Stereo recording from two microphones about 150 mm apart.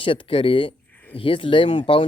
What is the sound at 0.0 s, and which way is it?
Speech, 35° left (ahead or behind).